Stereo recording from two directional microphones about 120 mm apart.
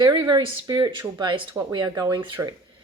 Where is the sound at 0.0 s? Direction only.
40° right (ahead or behind).